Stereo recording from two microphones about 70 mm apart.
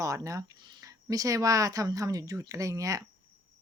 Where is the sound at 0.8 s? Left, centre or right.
Right.